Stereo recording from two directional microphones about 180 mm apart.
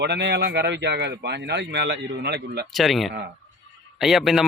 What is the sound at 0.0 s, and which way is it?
Speech, 70° right (ahead or behind).